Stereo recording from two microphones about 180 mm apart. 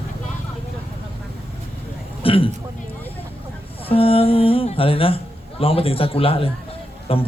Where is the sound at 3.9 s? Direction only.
30° left (ahead or behind).